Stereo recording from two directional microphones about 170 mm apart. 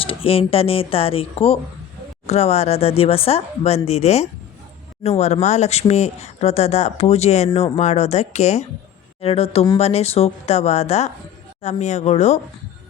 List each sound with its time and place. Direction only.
0.0 s speech: 35° left (ahead or behind)